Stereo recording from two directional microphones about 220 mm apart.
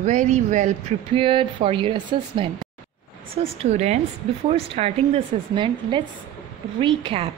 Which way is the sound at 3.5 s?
30° right (ahead or behind).